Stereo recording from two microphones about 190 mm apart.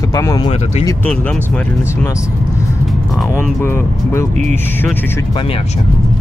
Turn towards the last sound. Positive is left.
turn(degrees=15)  # may be behind; listen again after turning